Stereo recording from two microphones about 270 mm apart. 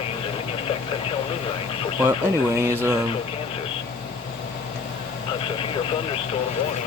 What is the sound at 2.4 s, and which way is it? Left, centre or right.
Speech, centre.